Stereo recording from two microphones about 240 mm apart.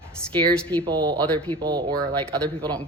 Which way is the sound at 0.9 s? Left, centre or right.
Centre.